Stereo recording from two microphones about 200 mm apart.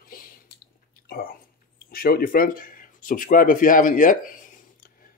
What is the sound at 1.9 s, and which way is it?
Speech, 50° left (ahead or behind).